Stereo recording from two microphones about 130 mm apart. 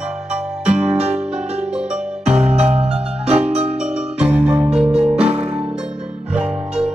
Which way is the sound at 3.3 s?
55° right (ahead or behind).